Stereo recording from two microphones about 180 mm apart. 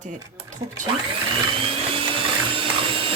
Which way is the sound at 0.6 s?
15° right (ahead or behind).